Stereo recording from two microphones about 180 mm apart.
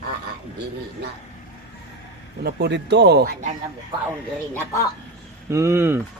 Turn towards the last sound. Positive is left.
turn(degrees=-15)  # may be behind; listen again after turning